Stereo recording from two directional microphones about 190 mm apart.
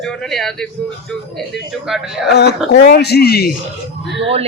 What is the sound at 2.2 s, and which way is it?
Speech, 60° left (ahead or behind).